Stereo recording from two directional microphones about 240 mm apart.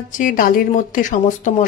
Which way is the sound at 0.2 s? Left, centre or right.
Left.